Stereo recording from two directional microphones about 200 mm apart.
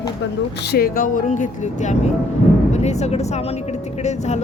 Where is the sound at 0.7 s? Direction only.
50° left (ahead or behind).